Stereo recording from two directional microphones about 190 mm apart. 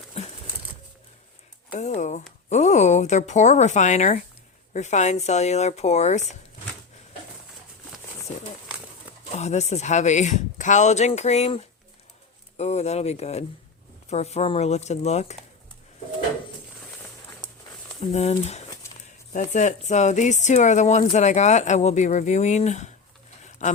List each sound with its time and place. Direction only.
0.1 s crumpling: 30° left (ahead or behind)
1.7 s speech: 35° left (ahead or behind)
9.3 s speech: 35° left (ahead or behind)
18.0 s speech: 35° left (ahead or behind)
23.4 s a sound: 40° left (ahead or behind)